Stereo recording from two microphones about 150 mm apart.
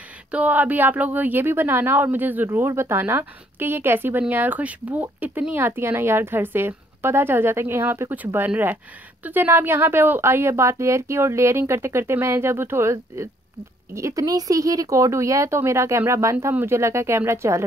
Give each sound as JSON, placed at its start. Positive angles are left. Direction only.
{"t": 0.3, "sound": "speech", "side_deg": -10}